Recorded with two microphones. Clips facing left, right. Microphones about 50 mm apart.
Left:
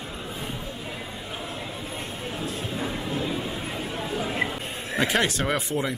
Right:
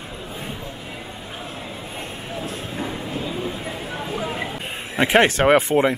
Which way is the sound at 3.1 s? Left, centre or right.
Right.